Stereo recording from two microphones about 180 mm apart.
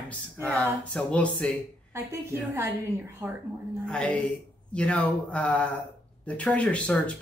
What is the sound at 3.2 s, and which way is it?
Speech, 15° right (ahead or behind).